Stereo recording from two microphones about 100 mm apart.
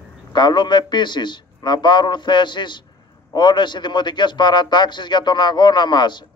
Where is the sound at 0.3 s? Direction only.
50° left (ahead or behind).